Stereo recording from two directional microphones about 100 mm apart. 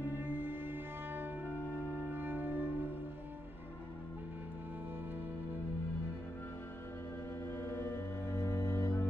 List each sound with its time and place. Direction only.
0.0 s music: 20° right (ahead or behind)
7.4 s music: 25° left (ahead or behind)